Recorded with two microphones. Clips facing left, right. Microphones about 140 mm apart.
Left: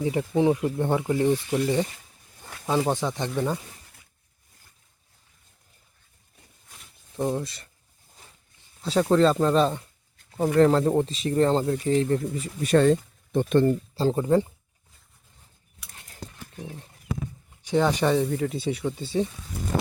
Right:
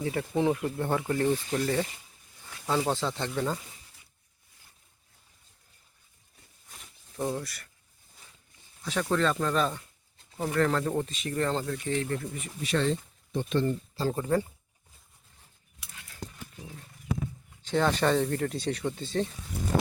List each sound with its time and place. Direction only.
0.0 s speech: 20° left (ahead or behind)
7.2 s speech: 20° left (ahead or behind)
8.8 s speech: 30° left (ahead or behind)
12.6 s speech: 50° left (ahead or behind)
13.9 s speech: 25° left (ahead or behind)
16.0 s horse: 40° left (ahead or behind)
16.6 s speech: 25° left (ahead or behind)
17.6 s speech: 15° left (ahead or behind)